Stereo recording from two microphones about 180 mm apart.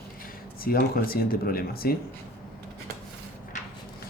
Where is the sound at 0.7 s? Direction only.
55° left (ahead or behind).